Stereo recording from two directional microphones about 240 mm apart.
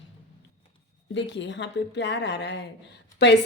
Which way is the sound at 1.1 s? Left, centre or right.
Left.